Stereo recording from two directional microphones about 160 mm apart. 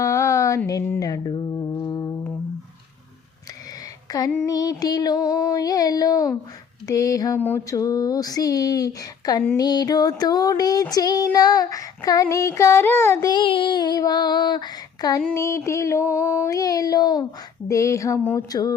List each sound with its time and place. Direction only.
0.0 s a sound: 20° left (ahead or behind)
0.7 s music: 20° left (ahead or behind)
4.1 s female singing: 25° left (ahead or behind)
4.4 s music: 20° left (ahead or behind)